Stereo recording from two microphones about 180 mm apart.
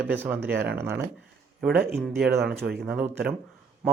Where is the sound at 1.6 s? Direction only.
Centre (ahead or behind).